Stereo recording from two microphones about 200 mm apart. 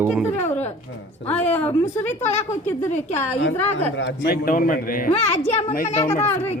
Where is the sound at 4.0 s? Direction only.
55° left (ahead or behind); by 6.0 s 35° left (ahead or behind).